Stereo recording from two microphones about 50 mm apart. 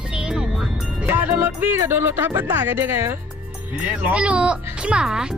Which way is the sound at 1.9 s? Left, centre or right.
Right.